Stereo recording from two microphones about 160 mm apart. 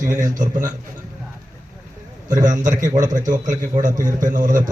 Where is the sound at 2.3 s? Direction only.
55° right (ahead or behind).